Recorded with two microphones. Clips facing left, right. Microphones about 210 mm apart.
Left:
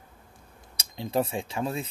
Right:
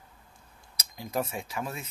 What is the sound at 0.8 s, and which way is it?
Speech, 30° left (ahead or behind).